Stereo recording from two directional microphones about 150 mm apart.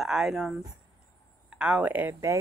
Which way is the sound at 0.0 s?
Centre (ahead or behind).